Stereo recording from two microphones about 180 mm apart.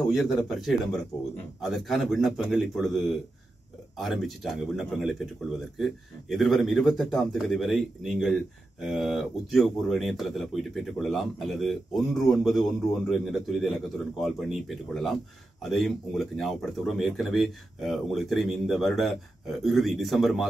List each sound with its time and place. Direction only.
0.1 s a man's voice: centre (ahead or behind)